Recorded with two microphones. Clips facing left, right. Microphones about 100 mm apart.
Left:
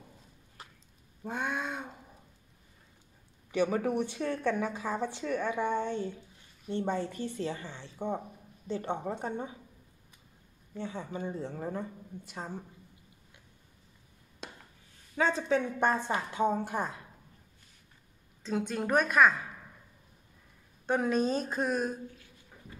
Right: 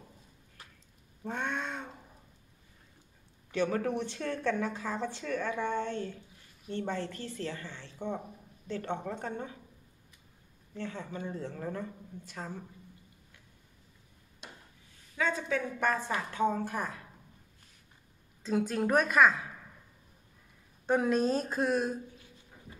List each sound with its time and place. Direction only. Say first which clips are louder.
1.2 s cat: left 1 dB; 5° left (ahead or behind)
3.5 s speech: left 2 dB; 15° left (ahead or behind)
10.7 s speech: left 1 dB; 15° left (ahead or behind)
15.1 s a woman's voice: left 3 dB; 30° left (ahead or behind)
18.4 s speech: right 2 dB; centre (ahead or behind)
20.8 s speech: right 1 dB; centre (ahead or behind)